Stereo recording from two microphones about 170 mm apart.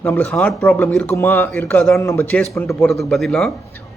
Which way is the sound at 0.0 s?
10° left (ahead or behind).